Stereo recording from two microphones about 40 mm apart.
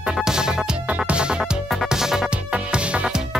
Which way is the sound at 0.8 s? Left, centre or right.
Right.